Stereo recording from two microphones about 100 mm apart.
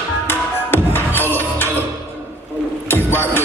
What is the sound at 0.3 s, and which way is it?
Music, 20° left (ahead or behind).